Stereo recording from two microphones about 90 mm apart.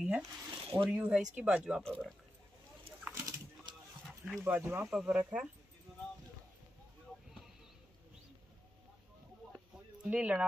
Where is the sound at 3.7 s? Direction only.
55° right (ahead or behind).